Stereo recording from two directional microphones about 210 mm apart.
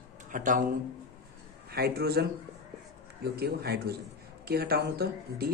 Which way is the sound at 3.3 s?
50° right (ahead or behind).